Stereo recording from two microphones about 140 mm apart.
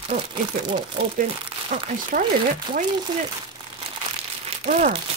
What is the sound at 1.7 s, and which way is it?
Speech, 55° right (ahead or behind).